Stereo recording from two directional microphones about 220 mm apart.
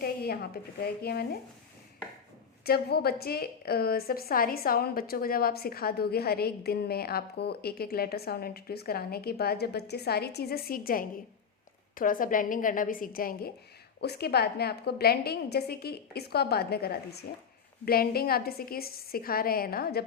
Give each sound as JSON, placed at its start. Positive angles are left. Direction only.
{"t": 0.0, "sound": "a woman's voice", "side_deg": 45}
{"t": 2.6, "sound": "a woman's voice", "side_deg": 45}